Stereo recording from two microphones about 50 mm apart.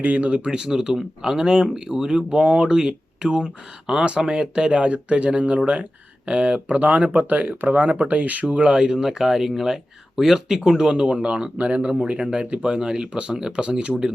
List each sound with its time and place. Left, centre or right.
0.0 s speech: right